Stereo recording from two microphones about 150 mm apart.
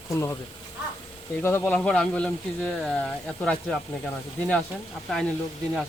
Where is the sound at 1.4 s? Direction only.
15° left (ahead or behind).